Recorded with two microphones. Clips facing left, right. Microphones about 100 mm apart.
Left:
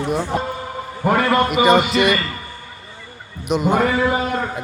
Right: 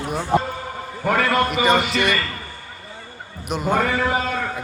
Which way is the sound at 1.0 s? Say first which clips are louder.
Left 3 dB; 15° left (ahead or behind).